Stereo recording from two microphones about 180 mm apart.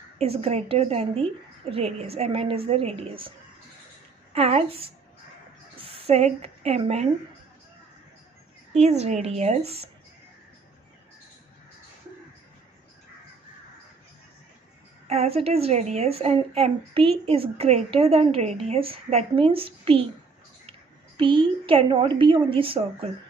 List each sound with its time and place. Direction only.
0.2 s a woman's voice: 35° right (ahead or behind)
8.7 s speech: 35° right (ahead or behind)
15.0 s speech: 35° right (ahead or behind)
21.2 s a woman's voice: 30° right (ahead or behind)